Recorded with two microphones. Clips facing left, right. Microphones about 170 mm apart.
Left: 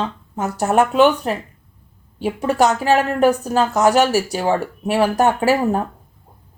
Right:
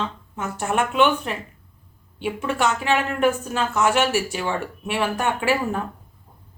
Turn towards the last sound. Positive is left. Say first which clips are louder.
# left 6 dB
turn(degrees=40)  # may be behind; listen again after turning